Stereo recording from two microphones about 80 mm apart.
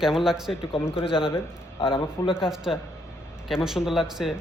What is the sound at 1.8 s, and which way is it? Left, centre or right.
Speech, left.